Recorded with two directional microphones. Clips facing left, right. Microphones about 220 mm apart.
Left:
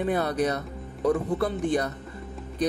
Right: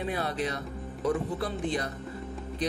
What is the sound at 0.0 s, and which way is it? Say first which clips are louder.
Speech: left 6 dB; 50° left (ahead or behind).